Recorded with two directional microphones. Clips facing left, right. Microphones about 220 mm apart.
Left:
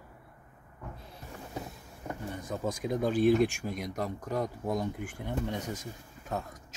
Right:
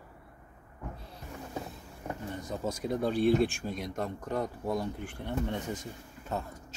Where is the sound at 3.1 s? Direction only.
45° left (ahead or behind).